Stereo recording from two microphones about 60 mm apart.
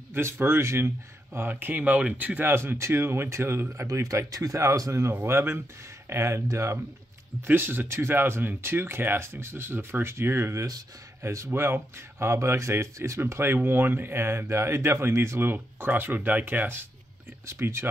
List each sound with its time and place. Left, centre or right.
0.1 s speech: right
1.5 s speech: right
2.5 s speech: right
3.9 s speech: right
5.1 s speech: right
7.4 s speech: right
13.2 s speech: right
17.5 s speech: right